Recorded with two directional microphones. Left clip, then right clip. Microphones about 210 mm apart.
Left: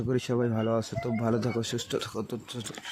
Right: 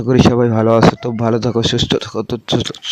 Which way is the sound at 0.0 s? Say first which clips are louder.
Right 16 dB; 45° right (ahead or behind).